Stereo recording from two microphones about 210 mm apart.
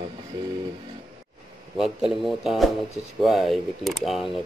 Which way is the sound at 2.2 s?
Centre (ahead or behind).